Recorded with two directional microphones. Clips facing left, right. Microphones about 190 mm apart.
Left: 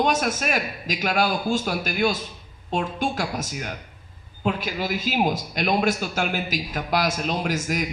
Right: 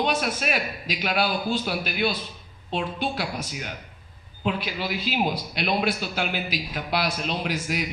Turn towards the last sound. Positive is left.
turn(degrees=45)  # may be behind; listen again after turning